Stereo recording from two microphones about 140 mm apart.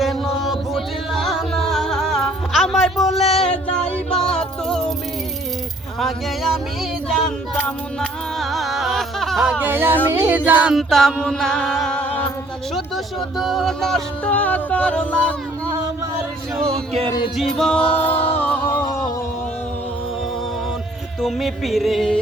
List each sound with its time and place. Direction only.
0.0 s music: centre (ahead or behind)
6.0 s speech: centre (ahead or behind)
7.1 s music: 5° left (ahead or behind)
9.6 s a sound: 15° right (ahead or behind)
10.8 s music: 5° left (ahead or behind)
12.7 s speech: centre (ahead or behind)
17.1 s music: 30° left (ahead or behind)
17.3 s music: 5° left (ahead or behind)
17.8 s music: 45° left (ahead or behind)
18.3 s music: 10° left (ahead or behind)
21.2 s music: centre (ahead or behind)